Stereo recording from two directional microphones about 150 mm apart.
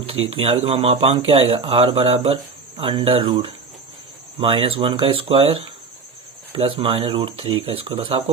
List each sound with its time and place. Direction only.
0.1 s speech: 40° right (ahead or behind)